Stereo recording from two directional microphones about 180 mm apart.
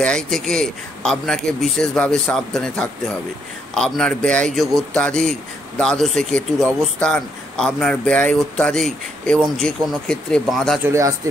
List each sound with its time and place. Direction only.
0.0 s speech: 5° left (ahead or behind)
10.9 s speech: 15° right (ahead or behind)